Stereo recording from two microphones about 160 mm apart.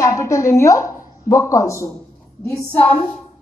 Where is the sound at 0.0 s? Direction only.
20° left (ahead or behind).